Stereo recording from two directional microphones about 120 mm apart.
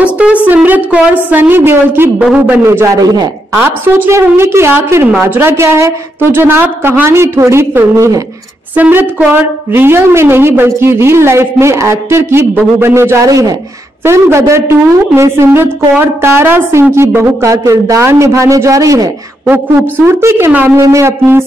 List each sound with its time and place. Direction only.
0.0 s music: 10° right (ahead or behind)
0.5 s a woman's voice: 15° right (ahead or behind)
20.1 s a woman's voice: 20° right (ahead or behind)